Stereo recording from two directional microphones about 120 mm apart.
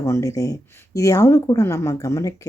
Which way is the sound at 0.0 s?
25° left (ahead or behind).